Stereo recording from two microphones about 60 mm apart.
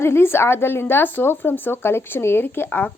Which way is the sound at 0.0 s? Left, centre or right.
Left.